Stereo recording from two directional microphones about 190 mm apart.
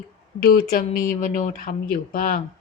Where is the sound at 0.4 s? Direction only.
50° left (ahead or behind).